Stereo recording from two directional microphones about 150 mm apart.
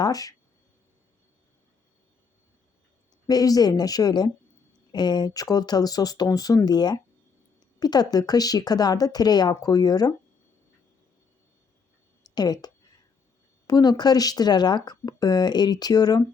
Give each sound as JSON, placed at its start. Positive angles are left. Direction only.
{"t": 0.0, "sound": "speech", "side_deg": 25}
{"t": 3.2, "sound": "speech", "side_deg": 25}
{"t": 12.2, "sound": "a sound", "side_deg": 25}
{"t": 13.7, "sound": "speech", "side_deg": 25}